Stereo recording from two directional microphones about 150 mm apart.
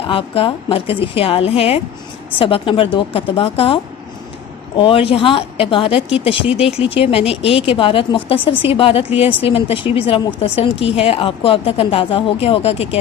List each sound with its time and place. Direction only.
0.1 s speech: 35° left (ahead or behind)
4.8 s speech: 35° left (ahead or behind)